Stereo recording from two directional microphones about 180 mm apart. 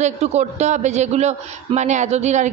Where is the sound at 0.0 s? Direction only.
35° right (ahead or behind).